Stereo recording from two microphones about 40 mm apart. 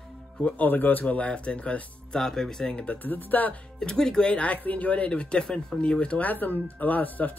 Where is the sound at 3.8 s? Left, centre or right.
Centre.